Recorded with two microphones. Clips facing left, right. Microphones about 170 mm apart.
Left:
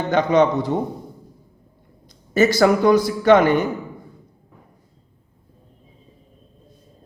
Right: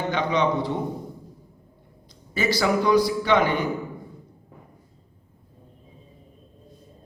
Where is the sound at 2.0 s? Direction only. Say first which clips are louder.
Left 8 dB; 45° left (ahead or behind).